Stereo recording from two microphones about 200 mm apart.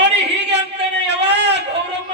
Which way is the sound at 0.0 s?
60° right (ahead or behind).